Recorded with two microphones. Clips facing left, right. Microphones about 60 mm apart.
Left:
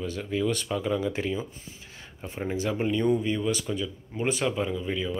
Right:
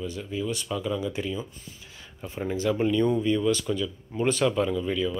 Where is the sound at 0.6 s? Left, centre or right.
Left.